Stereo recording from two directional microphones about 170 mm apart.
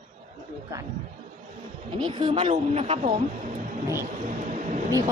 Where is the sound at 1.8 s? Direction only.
30° right (ahead or behind).